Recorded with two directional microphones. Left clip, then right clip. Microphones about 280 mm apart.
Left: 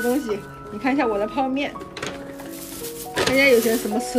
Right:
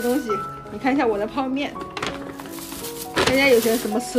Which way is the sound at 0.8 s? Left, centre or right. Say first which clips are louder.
Right 1 dB; centre.